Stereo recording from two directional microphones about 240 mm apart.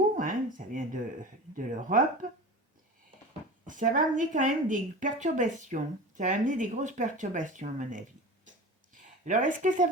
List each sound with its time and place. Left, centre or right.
0.2 s speech: right
3.7 s a woman's voice: right
8.9 s a sound: right